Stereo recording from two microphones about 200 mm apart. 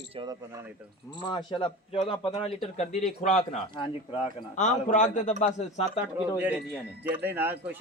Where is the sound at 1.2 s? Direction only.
20° left (ahead or behind).